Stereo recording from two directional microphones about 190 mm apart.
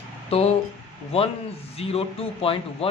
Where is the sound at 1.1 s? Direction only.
30° left (ahead or behind).